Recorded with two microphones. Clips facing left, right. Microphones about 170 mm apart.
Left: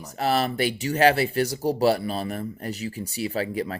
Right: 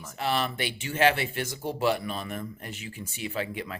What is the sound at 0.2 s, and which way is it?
Speech, 40° left (ahead or behind).